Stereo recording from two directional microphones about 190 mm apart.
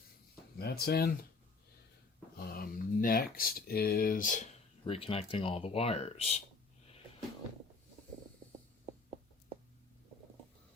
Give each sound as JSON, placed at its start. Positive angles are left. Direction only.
{"t": 0.6, "sound": "speech", "side_deg": 55}
{"t": 2.4, "sound": "speech", "side_deg": 50}
{"t": 4.9, "sound": "speech", "side_deg": 30}